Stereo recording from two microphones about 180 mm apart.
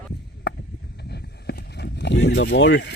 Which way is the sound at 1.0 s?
65° left (ahead or behind).